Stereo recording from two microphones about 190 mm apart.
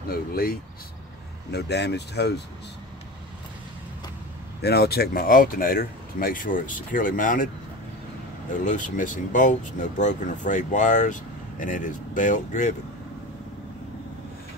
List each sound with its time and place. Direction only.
0.1 s speech: 50° left (ahead or behind)
4.6 s speech: 60° left (ahead or behind)
8.6 s speech: 45° left (ahead or behind)